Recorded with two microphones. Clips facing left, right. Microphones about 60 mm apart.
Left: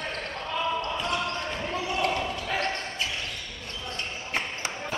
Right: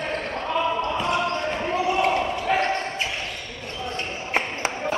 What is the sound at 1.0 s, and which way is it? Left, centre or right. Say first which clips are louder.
Basketball bounce: right 6 dB; right.